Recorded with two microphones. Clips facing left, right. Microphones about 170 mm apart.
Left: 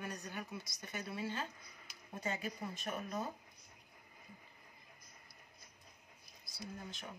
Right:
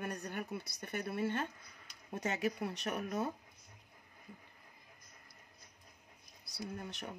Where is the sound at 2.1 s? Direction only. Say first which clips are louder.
Right 5 dB; 75° right (ahead or behind).